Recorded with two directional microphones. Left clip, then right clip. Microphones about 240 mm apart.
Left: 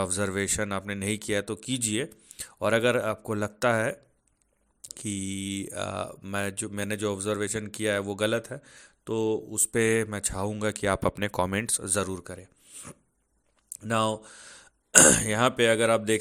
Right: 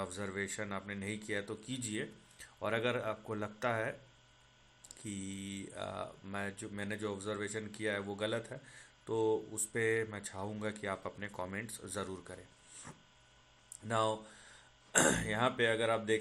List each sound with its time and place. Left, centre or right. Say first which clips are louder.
0.0 s speech: left 11 dB; left
4.9 s speech: left 11 dB; left
9.5 s speech: left 9 dB; left
13.8 s speech: left 7 dB; left